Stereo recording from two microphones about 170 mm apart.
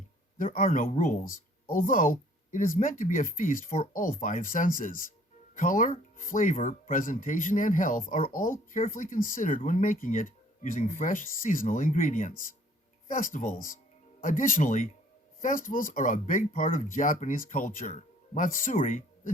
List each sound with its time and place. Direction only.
0.3 s speech: 50° left (ahead or behind)